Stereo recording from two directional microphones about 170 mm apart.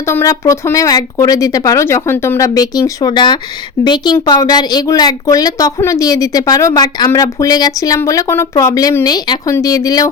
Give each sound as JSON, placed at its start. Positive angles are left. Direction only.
{"t": 0.1, "sound": "speech", "side_deg": 15}